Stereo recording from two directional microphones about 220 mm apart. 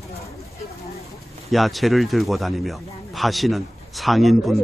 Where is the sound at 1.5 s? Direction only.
Centre (ahead or behind).